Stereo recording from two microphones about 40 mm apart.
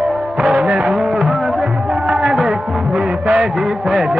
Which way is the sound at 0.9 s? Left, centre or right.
Centre.